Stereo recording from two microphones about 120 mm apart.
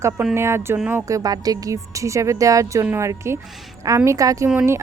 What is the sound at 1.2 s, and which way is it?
Speech, 30° right (ahead or behind).